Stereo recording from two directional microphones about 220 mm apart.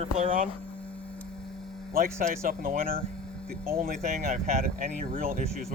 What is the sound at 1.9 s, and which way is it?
Speech, 40° right (ahead or behind).